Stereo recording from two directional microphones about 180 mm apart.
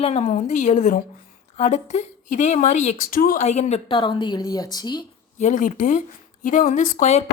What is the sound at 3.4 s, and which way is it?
Speech, 40° left (ahead or behind).